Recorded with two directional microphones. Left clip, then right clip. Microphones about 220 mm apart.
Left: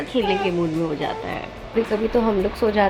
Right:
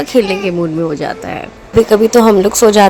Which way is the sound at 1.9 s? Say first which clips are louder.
Right 13 dB; 45° right (ahead or behind).